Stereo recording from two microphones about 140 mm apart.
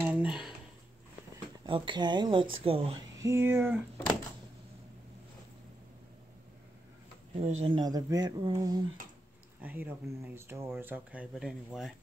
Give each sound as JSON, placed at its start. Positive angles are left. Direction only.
{"t": 0.0, "sound": "a sound", "side_deg": -10}
{"t": 1.7, "sound": "speech", "side_deg": -35}
{"t": 3.0, "sound": "speech", "side_deg": -20}
{"t": 7.3, "sound": "speech", "side_deg": -45}
{"t": 7.7, "sound": "speech", "side_deg": -25}
{"t": 9.6, "sound": "speech", "side_deg": -10}